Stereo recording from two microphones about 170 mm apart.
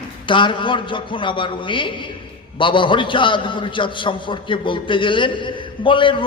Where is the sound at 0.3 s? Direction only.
30° left (ahead or behind).